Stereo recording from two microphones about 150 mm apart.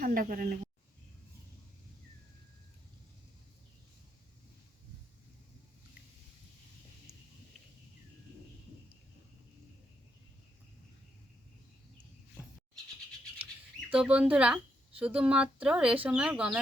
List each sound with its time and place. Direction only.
0.0 s a woman's voice: 70° right (ahead or behind)
13.9 s a woman's voice: 5° right (ahead or behind)